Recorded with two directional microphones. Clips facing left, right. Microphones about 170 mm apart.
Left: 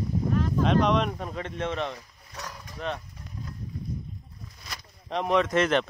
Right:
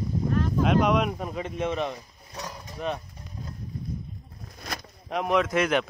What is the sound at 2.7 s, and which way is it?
Speech, 10° right (ahead or behind).